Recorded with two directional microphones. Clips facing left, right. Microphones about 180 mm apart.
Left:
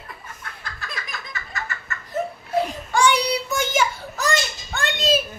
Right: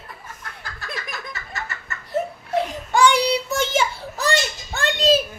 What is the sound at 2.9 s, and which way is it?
Child singing, 25° right (ahead or behind).